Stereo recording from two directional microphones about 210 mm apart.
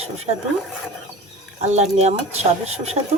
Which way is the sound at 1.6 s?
30° right (ahead or behind).